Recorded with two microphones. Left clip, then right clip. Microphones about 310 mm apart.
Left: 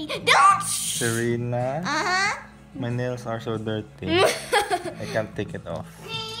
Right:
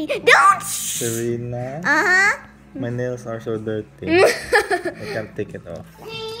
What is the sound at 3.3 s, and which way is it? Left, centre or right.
Speech, left.